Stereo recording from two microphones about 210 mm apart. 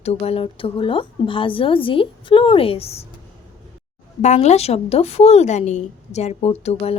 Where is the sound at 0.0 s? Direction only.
30° left (ahead or behind).